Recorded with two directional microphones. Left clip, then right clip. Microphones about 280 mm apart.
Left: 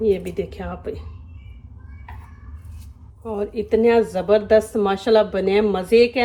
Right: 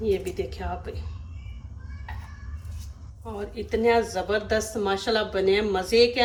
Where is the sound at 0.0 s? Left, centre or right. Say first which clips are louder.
Left 6 dB; left.